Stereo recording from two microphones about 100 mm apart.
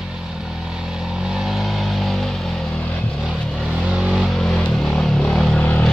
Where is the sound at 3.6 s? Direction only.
10° right (ahead or behind).